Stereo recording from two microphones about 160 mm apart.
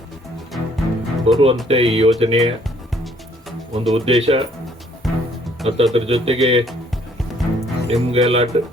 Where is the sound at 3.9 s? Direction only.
40° right (ahead or behind).